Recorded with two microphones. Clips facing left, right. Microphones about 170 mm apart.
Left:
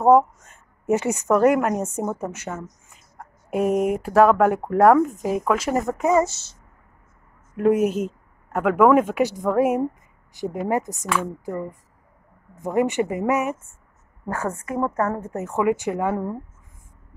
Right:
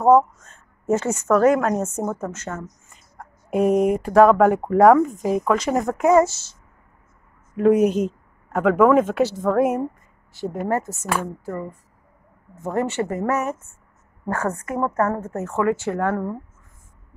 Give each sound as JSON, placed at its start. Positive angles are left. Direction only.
{"t": 0.1, "sound": "a woman's voice", "side_deg": 15}
{"t": 7.5, "sound": "a woman's voice", "side_deg": 5}
{"t": 12.5, "sound": "a woman's voice", "side_deg": 15}
{"t": 14.8, "sound": "a woman's voice", "side_deg": 15}